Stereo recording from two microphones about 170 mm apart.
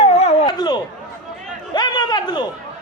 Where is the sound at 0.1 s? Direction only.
40° left (ahead or behind).